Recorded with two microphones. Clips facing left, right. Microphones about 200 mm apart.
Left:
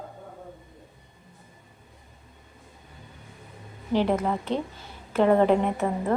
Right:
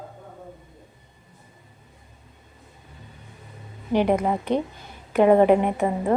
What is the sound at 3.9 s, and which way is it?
A woman's voice, 15° right (ahead or behind).